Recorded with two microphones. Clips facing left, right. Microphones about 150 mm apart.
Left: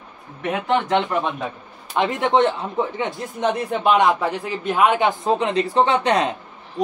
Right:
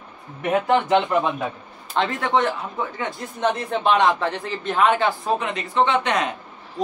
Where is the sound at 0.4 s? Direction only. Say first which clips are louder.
Right 2 dB; 10° right (ahead or behind).